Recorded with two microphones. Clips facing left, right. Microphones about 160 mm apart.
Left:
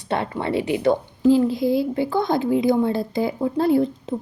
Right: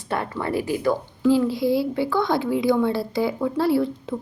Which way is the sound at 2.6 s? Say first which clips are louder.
Left 1 dB; 45° left (ahead or behind).